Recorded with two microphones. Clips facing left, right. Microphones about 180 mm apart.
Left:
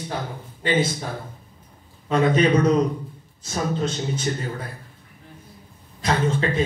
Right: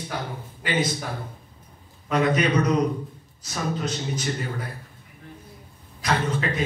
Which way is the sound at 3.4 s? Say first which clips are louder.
Left 3 dB; 30° left (ahead or behind).